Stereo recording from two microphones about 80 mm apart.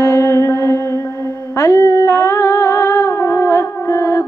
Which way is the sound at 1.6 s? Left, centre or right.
Left.